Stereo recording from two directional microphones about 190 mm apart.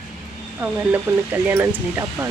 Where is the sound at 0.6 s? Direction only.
10° right (ahead or behind).